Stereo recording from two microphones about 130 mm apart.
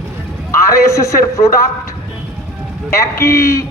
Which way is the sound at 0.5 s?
20° left (ahead or behind).